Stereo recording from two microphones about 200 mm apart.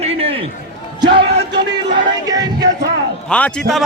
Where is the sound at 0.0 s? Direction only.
30° right (ahead or behind).